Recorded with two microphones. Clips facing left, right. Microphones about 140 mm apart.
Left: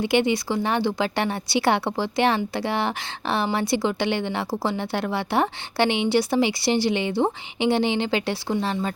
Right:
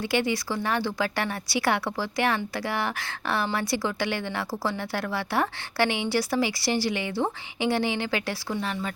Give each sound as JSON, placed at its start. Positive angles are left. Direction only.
{"t": 0.0, "sound": "speech", "side_deg": 20}